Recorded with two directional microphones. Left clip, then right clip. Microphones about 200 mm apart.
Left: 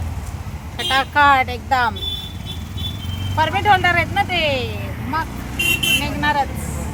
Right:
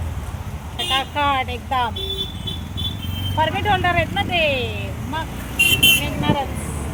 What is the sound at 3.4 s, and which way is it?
Speech, 15° left (ahead or behind).